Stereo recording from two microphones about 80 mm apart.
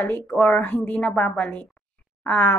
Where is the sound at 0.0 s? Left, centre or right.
Left.